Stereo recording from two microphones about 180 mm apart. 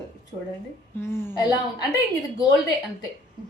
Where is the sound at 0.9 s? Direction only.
15° left (ahead or behind).